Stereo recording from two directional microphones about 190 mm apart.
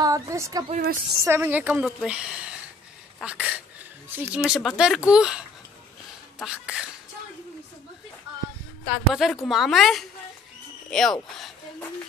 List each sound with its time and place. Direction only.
0.0 s a woman's voice: 15° right (ahead or behind)
0.7 s a woman's voice: 50° right (ahead or behind)
1.2 s a woman's voice: 10° right (ahead or behind)
6.4 s a woman's voice: 5° right (ahead or behind)
9.1 s a woman's voice: centre (ahead or behind)